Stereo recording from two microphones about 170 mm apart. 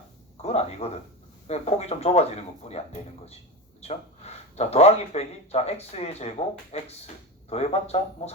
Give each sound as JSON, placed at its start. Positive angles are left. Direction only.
{"t": 0.4, "sound": "a man's voice", "side_deg": 40}